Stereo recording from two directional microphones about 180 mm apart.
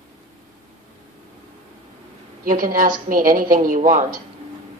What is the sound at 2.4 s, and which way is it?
A woman's voice, 50° right (ahead or behind).